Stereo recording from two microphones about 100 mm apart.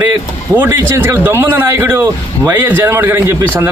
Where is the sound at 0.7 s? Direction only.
25° right (ahead or behind).